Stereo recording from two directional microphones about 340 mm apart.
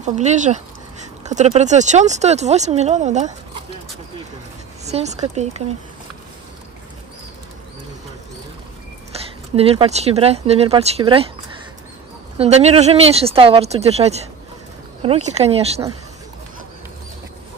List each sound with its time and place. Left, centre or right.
0.0 s speech: right
4.8 s speech: centre
9.6 s speech: centre
12.4 s speech: centre